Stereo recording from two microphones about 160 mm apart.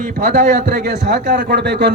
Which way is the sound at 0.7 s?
90° right.